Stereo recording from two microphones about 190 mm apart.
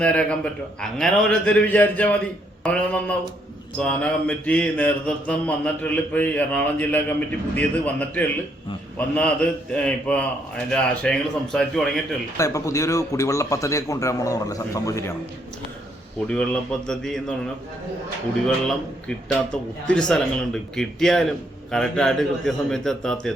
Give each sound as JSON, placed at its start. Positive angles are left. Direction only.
{"t": 0.0, "sound": "mantra", "side_deg": 5}
{"t": 9.1, "sound": "a man's voice", "side_deg": 5}
{"t": 12.4, "sound": "mantra", "side_deg": 15}
{"t": 16.2, "sound": "a man's voice", "side_deg": 5}
{"t": 19.9, "sound": "a man's voice", "side_deg": 5}